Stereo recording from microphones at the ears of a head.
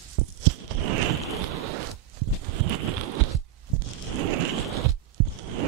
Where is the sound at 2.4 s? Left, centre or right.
Right.